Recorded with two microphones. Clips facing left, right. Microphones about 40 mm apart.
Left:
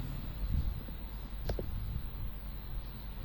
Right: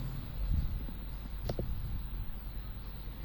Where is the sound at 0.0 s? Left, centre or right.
Left.